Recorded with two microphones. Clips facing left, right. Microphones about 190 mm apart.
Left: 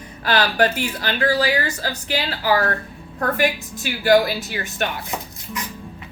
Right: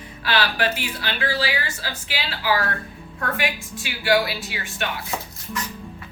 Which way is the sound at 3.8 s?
45° left (ahead or behind).